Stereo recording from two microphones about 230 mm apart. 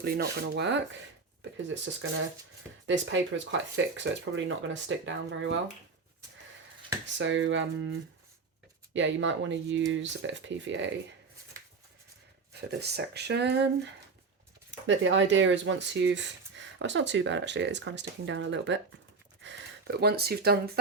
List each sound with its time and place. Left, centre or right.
0.0 s rub: right
1.7 s speech: right
7.2 s speech: right
12.5 s speech: right
14.8 s speech: right
19.4 s gasp: right